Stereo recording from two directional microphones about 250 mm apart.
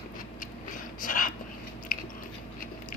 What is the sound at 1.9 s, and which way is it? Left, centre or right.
Biting, left.